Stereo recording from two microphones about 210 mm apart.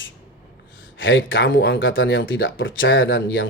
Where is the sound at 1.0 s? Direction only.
65° left (ahead or behind).